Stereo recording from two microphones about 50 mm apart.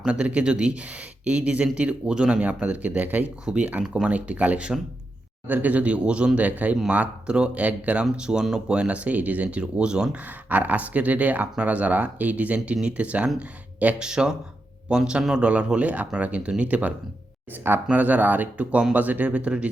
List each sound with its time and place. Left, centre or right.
0.0 s speech: right
3.4 s speech: centre
5.5 s speech: right
8.1 s speech: centre
10.2 s speech: right
12.5 s speech: centre
14.0 s speech: centre
17.9 s speech: right